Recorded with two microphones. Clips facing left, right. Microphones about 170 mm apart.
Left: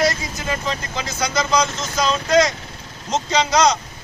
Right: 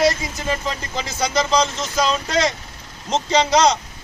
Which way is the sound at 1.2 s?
30° right (ahead or behind).